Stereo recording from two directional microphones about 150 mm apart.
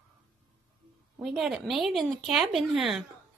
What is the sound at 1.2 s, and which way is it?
A woman's voice, centre (ahead or behind).